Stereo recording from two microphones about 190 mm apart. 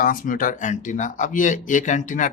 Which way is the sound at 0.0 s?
45° left (ahead or behind).